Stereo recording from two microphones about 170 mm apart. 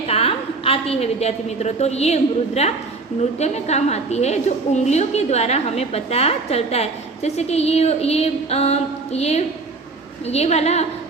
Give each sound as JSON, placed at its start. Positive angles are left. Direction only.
{"t": 0.1, "sound": "a woman's voice", "side_deg": 35}